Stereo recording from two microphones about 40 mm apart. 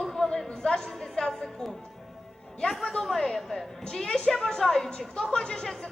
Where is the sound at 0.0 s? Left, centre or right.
Centre.